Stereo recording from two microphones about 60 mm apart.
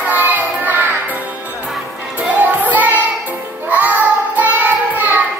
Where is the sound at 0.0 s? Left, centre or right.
Right.